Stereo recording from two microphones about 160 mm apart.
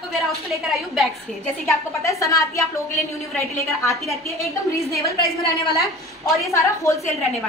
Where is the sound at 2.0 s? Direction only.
20° left (ahead or behind).